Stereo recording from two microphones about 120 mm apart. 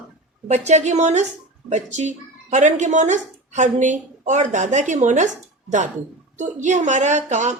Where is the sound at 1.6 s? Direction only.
90° right.